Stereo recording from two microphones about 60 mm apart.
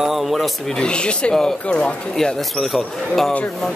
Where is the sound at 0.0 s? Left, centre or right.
Centre.